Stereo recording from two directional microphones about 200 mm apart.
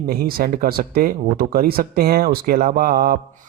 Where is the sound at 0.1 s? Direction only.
50° right (ahead or behind).